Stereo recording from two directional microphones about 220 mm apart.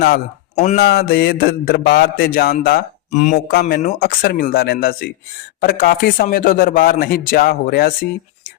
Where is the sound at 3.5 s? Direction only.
45° left (ahead or behind).